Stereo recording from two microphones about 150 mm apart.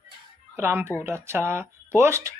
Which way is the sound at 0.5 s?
15° right (ahead or behind).